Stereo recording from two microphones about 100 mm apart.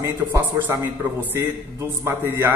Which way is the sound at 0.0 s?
25° right (ahead or behind).